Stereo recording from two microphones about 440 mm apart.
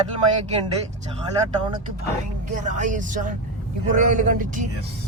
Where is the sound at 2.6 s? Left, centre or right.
Centre.